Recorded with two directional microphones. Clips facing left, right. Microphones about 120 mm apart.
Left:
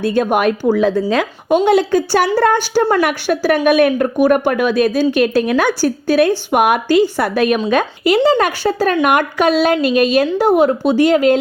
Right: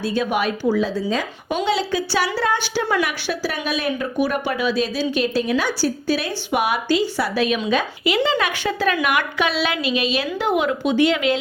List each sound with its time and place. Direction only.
0.0 s a woman's voice: 55° left (ahead or behind)